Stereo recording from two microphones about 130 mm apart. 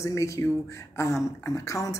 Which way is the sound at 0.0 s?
25° left (ahead or behind).